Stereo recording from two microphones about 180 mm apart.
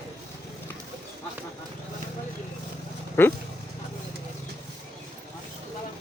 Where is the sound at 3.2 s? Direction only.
10° left (ahead or behind).